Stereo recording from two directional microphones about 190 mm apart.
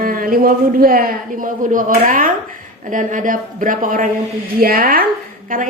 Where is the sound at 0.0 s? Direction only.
45° right (ahead or behind).